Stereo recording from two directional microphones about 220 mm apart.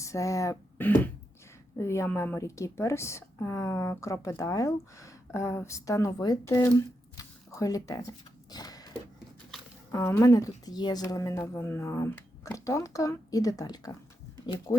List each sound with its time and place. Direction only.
0.0 s a woman's voice: 15° left (ahead or behind)
8.4 s a sound: 15° left (ahead or behind)
9.9 s a woman's voice: 10° left (ahead or behind)